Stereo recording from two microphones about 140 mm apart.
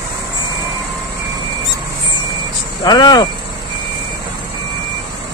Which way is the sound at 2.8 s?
30° left (ahead or behind).